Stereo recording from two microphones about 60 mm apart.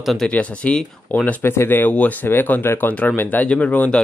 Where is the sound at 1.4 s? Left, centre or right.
Left.